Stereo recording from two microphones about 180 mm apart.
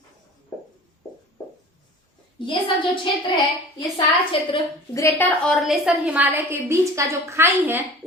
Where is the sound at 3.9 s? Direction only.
30° left (ahead or behind).